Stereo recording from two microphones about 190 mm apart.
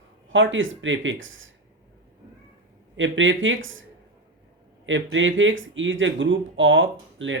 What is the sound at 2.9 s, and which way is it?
Speech, 85° right.